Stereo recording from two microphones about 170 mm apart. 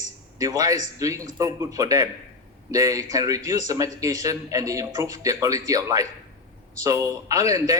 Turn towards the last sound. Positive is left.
turn(degrees=-20)  # may be behind; listen again after turning